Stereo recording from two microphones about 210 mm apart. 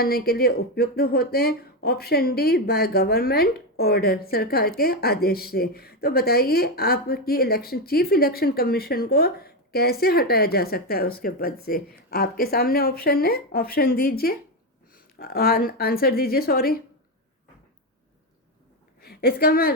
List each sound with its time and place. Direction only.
0.0 s speech: 45° left (ahead or behind)
19.0 s a woman's voice: 45° left (ahead or behind)